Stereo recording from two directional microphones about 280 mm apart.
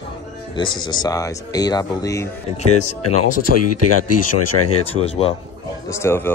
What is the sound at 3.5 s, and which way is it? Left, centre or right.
Speech, left.